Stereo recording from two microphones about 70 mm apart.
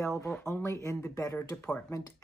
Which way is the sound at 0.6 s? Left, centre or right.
Left.